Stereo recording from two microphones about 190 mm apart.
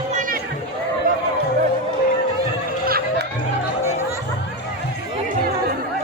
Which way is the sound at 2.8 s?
55° right (ahead or behind).